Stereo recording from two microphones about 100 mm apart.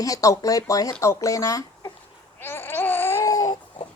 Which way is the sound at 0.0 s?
35° left (ahead or behind).